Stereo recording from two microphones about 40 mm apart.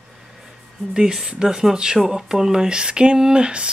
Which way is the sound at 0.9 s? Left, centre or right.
Centre.